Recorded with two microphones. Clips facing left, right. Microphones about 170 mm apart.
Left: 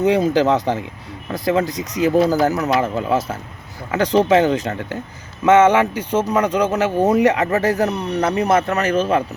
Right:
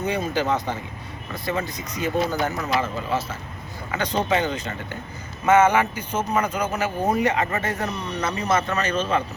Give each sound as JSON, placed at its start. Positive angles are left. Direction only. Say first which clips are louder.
{"t": 0.0, "sound": "speech", "louder": "left 9 dB", "side_deg": 90}